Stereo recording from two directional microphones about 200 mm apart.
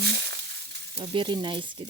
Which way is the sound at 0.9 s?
25° right (ahead or behind).